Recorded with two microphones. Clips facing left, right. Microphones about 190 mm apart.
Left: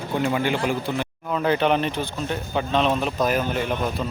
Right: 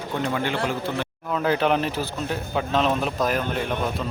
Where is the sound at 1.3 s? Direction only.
Centre (ahead or behind).